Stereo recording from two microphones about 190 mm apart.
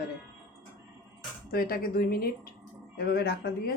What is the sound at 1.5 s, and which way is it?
Speech, 50° left (ahead or behind).